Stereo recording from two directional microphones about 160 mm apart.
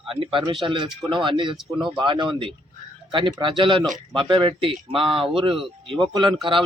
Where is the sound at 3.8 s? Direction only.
Centre (ahead or behind).